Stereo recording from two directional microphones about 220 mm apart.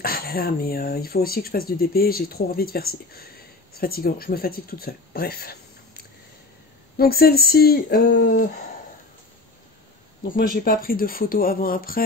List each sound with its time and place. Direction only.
0.0 s speech: 40° left (ahead or behind)
10.2 s speech: 40° left (ahead or behind)